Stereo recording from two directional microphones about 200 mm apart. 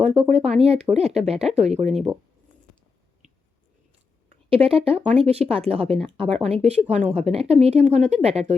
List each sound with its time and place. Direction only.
0.0 s speech: 30° right (ahead or behind)
1.9 s speech: centre (ahead or behind)
4.3 s speech: 30° right (ahead or behind)